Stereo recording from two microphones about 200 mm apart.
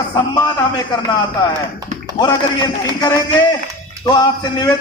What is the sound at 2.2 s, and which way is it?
Speech, 20° left (ahead or behind).